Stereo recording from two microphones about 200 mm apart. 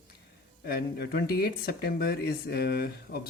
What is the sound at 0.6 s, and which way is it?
Speech, 50° left (ahead or behind).